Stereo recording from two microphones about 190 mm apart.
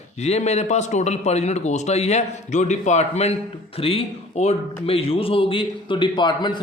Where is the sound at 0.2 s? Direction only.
35° left (ahead or behind).